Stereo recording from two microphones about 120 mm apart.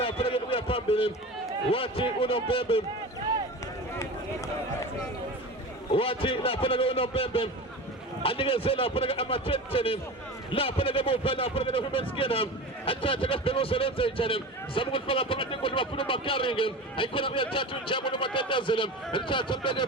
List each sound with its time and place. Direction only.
0.0 s a sound: 50° left (ahead or behind)
1.7 s a man's voice: 50° left (ahead or behind)
3.9 s speech: 25° left (ahead or behind)
5.9 s a man's voice: 50° left (ahead or behind)